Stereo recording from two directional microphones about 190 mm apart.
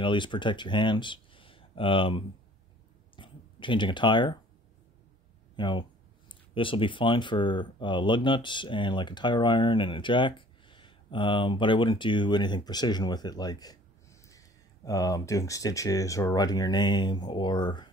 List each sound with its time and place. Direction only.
0.0 s speech: 25° left (ahead or behind)
3.2 s a sound: 25° left (ahead or behind)
5.6 s speech: 25° left (ahead or behind)
14.9 s speech: 15° left (ahead or behind)